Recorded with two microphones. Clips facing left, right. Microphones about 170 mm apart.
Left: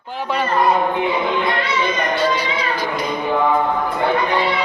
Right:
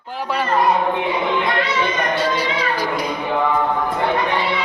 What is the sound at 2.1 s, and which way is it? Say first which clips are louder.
Music: left 1 dB; 30° right (ahead or behind).